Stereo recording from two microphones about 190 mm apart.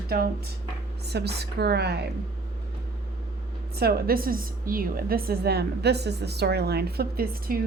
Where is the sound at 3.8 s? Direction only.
55° right (ahead or behind).